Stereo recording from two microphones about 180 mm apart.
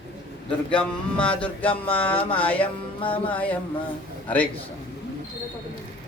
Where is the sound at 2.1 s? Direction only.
30° left (ahead or behind).